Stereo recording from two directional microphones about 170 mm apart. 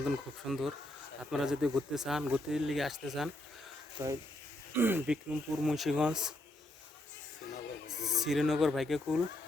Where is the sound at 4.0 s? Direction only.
20° right (ahead or behind); by 6.3 s 5° right (ahead or behind).